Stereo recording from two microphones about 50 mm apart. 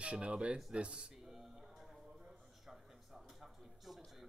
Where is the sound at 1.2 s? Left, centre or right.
Centre.